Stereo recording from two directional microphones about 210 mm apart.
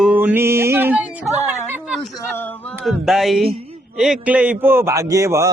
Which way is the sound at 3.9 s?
5° right (ahead or behind).